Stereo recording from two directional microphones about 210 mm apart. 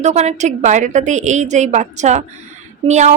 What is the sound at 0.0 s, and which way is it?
A woman's voice, 35° right (ahead or behind).